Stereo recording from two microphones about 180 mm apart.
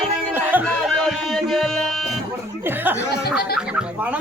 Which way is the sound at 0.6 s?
5° left (ahead or behind).